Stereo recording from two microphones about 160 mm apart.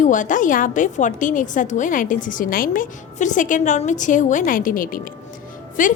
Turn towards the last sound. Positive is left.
turn(degrees=55)  # may be behind; listen again after turning